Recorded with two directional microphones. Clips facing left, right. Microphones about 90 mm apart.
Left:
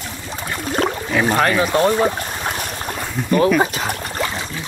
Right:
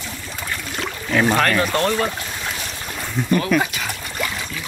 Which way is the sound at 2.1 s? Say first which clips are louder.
Left 4 dB; 40° left (ahead or behind).